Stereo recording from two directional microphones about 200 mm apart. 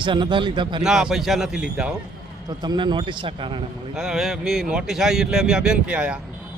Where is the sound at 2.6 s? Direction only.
20° right (ahead or behind).